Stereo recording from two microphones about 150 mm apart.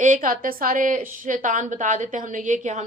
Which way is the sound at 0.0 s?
60° right (ahead or behind).